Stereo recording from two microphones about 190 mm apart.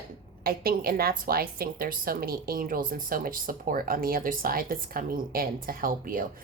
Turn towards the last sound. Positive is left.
turn(degrees=-50)  # may be behind; listen again after turning